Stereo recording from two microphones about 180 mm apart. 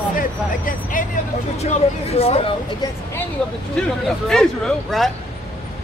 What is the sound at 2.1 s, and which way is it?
Speech, 35° left (ahead or behind).